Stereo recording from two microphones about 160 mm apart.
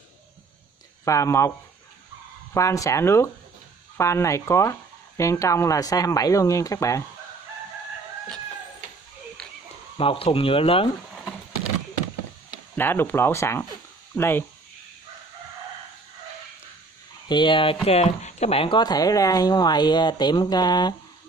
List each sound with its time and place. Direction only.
1.0 s speech: 20° left (ahead or behind)
2.5 s speech: 20° left (ahead or behind)
9.4 s a sound: 5° left (ahead or behind)
9.9 s speech: 35° left (ahead or behind)
12.7 s speech: 10° left (ahead or behind)
17.3 s speech: 30° left (ahead or behind)
17.8 s speech: 40° left (ahead or behind); by 20.9 s 25° left (ahead or behind)